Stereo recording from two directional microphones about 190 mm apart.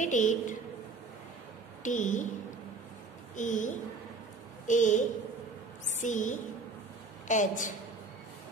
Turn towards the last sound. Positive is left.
turn(degrees=40)  # may be behind; listen again after turning